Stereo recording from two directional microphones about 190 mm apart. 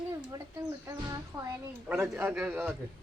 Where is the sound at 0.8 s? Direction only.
20° right (ahead or behind).